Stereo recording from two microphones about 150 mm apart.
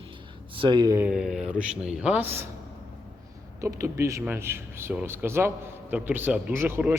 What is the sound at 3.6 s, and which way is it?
A man's voice, 20° right (ahead or behind).